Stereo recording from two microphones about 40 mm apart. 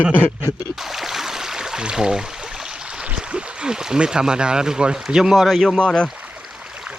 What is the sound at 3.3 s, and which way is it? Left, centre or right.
Speech, right.